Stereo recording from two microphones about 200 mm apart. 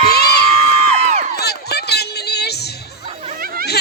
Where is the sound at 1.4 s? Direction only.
55° left (ahead or behind).